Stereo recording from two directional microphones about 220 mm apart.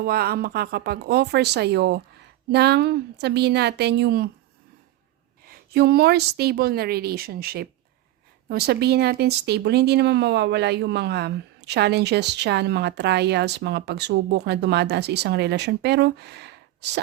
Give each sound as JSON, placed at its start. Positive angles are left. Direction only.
{"t": 0.0, "sound": "speech", "side_deg": -45}
{"t": 5.5, "sound": "speech", "side_deg": -45}